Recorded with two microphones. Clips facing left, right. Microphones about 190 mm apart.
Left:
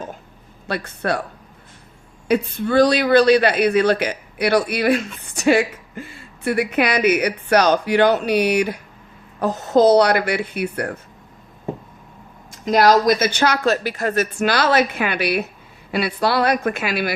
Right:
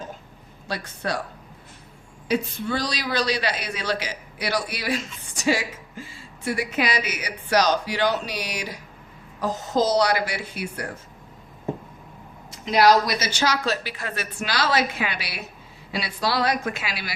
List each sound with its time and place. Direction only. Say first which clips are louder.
0.7 s speech: left 6 dB; 60° left (ahead or behind)
2.2 s speech: left 5 dB; 55° left (ahead or behind)
12.5 s a woman's voice: left 3 dB; 50° left (ahead or behind)